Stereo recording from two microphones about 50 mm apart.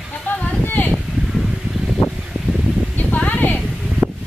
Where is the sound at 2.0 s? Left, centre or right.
Left.